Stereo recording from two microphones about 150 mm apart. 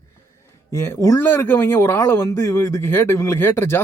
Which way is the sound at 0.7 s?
20° left (ahead or behind).